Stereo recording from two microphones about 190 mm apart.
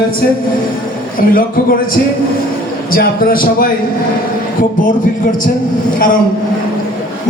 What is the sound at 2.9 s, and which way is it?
Speech, 50° left (ahead or behind).